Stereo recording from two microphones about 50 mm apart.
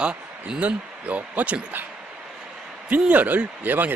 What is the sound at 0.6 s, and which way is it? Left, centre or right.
Speech, right.